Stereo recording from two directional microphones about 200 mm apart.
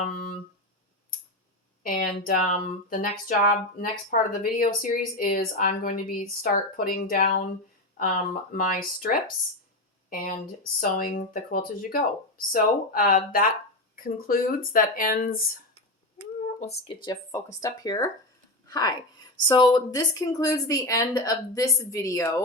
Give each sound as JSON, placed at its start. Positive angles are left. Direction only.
{"t": 0.0, "sound": "a sound", "side_deg": 45}
{"t": 1.8, "sound": "speech", "side_deg": 45}
{"t": 16.6, "sound": "a woman's voice", "side_deg": 30}